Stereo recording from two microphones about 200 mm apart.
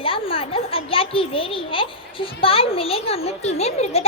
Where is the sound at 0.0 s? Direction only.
25° left (ahead or behind).